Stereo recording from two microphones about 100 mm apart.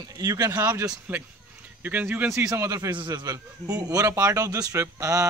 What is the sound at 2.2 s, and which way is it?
Speech, 30° right (ahead or behind).